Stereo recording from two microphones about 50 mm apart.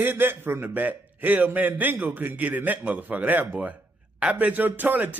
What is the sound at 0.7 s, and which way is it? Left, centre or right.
A man's voice, right.